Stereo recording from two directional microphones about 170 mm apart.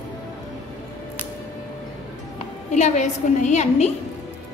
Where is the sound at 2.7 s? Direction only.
45° left (ahead or behind).